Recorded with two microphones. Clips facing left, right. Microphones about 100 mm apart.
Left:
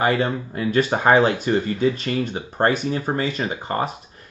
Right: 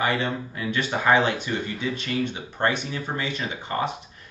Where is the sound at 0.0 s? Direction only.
40° left (ahead or behind).